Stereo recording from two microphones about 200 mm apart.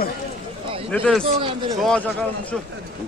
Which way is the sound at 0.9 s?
5° left (ahead or behind).